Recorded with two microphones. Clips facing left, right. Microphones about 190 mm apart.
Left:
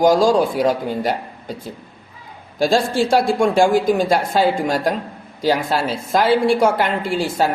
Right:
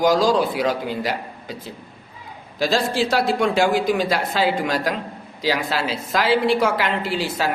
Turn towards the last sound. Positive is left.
turn(degrees=45)  # may be behind; listen again after turning